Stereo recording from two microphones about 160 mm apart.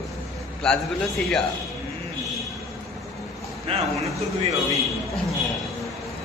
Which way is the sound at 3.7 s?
35° right (ahead or behind).